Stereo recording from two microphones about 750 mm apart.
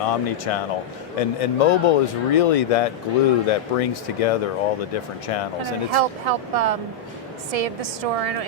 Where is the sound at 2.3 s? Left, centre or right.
Left.